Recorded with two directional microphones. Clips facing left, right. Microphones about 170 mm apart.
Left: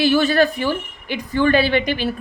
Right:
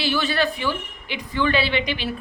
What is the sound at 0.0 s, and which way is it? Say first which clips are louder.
A woman's voice: left 7 dB; 45° left (ahead or behind).